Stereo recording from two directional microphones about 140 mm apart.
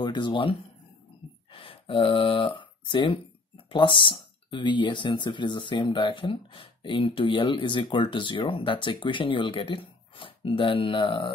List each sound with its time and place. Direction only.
0.0 s speech: 35° left (ahead or behind)